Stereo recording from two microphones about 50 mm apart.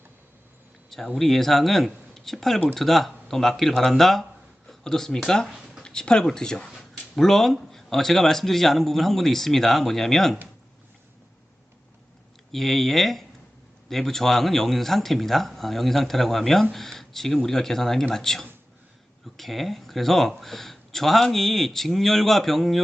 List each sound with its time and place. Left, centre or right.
0.9 s a man's voice: centre
12.5 s a man's voice: centre